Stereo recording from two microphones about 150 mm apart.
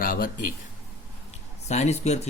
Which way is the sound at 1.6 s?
50° left (ahead or behind).